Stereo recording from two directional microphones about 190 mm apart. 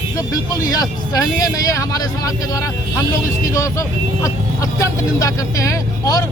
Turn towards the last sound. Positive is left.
turn(degrees=20)  # may be behind; listen again after turning